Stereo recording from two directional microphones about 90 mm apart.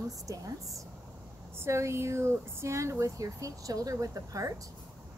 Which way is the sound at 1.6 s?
30° right (ahead or behind).